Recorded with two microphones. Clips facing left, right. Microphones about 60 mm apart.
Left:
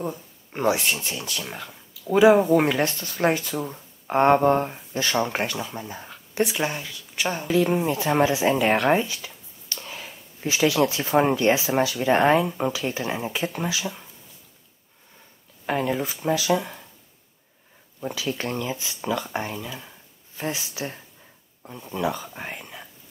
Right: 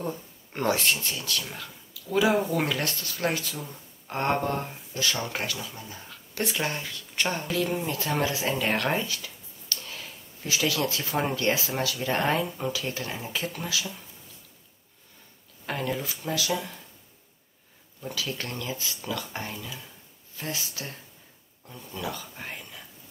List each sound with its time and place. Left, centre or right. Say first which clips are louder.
0.0 s speech: left 2 dB; centre; by 6.4 s left
6.4 s speech: left 4 dB; centre
7.5 s speech: left 10 dB; left
8.7 s a sound: left 6 dB; left
10.9 s speech: left 8 dB; left
15.6 s speech: left 6 dB; left
18.1 s speech: left 5 dB; centre